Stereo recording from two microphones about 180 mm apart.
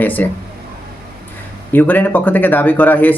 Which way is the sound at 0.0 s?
10° left (ahead or behind).